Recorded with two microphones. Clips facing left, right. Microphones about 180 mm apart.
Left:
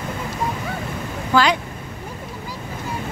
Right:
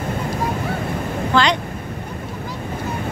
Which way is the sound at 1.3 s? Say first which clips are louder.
Even; 5° left (ahead or behind).